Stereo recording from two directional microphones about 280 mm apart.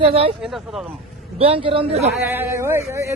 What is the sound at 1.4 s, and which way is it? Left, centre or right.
Speech, centre.